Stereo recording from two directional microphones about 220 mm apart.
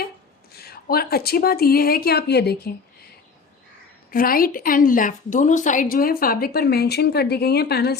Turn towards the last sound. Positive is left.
turn(degrees=45)  # may be behind; listen again after turning